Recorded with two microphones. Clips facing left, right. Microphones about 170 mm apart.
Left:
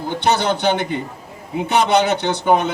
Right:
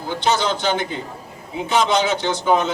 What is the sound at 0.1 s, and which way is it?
A man's voice, 60° left (ahead or behind).